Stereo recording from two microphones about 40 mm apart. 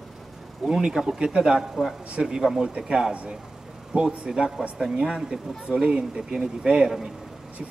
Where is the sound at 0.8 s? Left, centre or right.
Centre.